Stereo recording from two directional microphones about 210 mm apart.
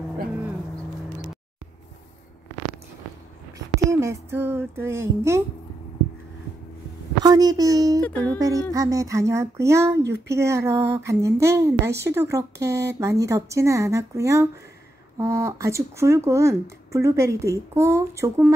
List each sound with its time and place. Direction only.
3.5 s a sound: 15° right (ahead or behind)
7.2 s speech: 20° right (ahead or behind)
8.0 s music: 5° left (ahead or behind)
8.4 s speech: 15° right (ahead or behind)